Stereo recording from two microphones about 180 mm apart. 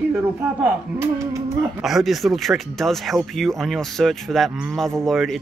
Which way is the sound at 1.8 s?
Centre (ahead or behind).